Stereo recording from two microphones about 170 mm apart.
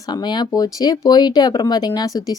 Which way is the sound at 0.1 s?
25° left (ahead or behind).